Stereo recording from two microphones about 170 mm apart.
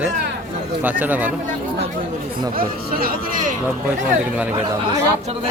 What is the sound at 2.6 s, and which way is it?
Speech, 60° right (ahead or behind).